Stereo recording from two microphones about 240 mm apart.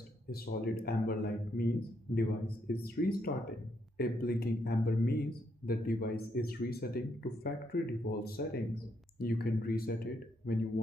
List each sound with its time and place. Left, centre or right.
0.3 s speech: left